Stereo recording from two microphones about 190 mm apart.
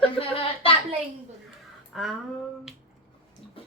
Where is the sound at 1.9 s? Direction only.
Centre (ahead or behind).